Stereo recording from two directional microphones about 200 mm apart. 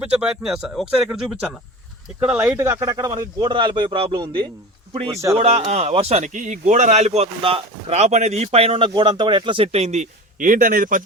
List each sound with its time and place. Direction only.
0.0 s a man's voice: 5° right (ahead or behind); by 11.0 s 40° right (ahead or behind)